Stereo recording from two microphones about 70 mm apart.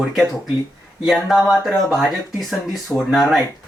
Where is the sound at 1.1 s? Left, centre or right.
Centre.